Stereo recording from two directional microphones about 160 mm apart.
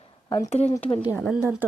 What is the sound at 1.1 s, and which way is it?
Speech, 5° right (ahead or behind).